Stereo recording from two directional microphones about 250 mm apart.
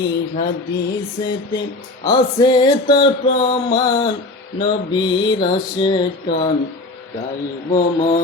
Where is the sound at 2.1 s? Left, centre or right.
Centre.